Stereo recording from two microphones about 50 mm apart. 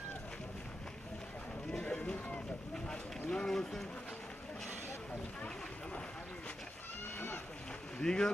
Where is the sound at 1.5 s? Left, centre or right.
Centre.